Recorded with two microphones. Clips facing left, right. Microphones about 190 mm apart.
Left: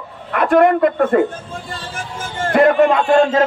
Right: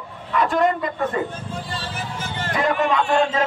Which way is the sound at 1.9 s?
50° left (ahead or behind).